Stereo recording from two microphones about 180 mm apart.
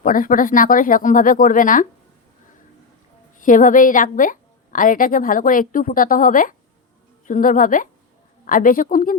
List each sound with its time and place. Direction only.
0.0 s a woman's voice: 50° left (ahead or behind)
3.3 s a woman's voice: 45° left (ahead or behind)